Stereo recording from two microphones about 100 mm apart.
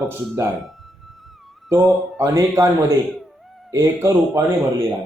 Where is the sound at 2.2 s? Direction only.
30° right (ahead or behind).